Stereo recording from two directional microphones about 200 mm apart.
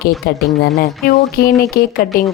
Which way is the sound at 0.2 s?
50° left (ahead or behind).